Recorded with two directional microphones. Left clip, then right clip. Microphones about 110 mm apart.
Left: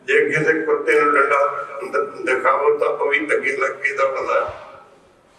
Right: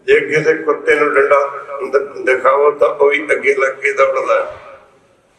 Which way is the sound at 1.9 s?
35° right (ahead or behind).